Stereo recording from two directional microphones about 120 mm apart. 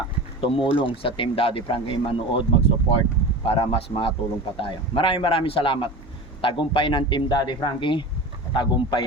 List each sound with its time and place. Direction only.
0.4 s speech: 45° left (ahead or behind)